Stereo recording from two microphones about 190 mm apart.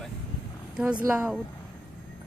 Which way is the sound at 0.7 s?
5° right (ahead or behind).